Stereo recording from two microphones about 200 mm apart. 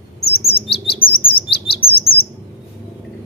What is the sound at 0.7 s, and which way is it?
Chirp, 25° left (ahead or behind).